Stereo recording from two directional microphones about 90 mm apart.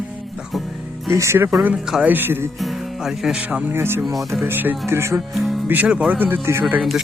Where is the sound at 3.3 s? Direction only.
15° right (ahead or behind).